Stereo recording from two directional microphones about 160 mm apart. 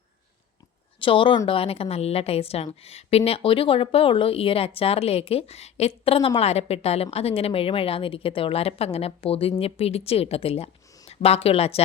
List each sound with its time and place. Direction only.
0.9 s a woman's voice: 30° left (ahead or behind)